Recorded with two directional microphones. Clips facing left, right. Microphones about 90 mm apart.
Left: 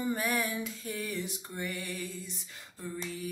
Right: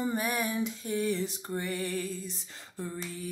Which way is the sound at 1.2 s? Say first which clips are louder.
Right 4 dB; 35° right (ahead or behind).